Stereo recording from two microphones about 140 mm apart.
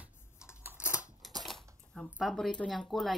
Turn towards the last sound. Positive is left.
turn(degrees=0)  # may be behind; listen again after turning